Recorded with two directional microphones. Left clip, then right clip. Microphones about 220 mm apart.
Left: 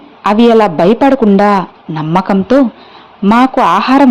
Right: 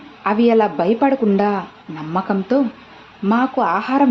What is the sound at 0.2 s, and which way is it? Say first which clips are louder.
Speech: left 7 dB; 35° left (ahead or behind).